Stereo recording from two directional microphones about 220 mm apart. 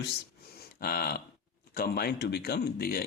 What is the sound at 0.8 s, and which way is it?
Speech, 45° left (ahead or behind).